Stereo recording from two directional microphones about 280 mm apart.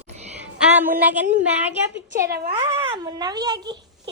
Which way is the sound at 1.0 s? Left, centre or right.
Centre.